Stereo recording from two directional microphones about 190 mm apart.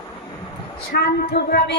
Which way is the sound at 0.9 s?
55° left (ahead or behind).